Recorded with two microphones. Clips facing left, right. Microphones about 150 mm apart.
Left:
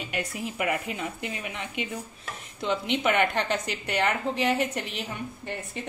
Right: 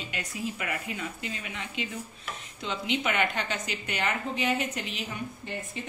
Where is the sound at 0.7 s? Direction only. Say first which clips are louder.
Left 5 dB; 65° left (ahead or behind).